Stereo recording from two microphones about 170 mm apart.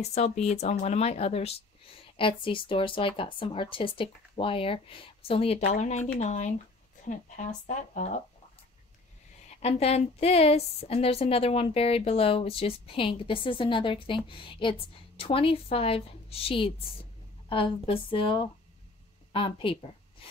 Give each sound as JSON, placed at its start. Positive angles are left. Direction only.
{"t": 0.0, "sound": "a woman's voice", "side_deg": 40}
{"t": 9.6, "sound": "a woman's voice", "side_deg": 35}